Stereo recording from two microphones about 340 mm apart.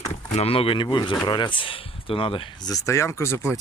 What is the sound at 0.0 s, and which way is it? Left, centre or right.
Speech, centre.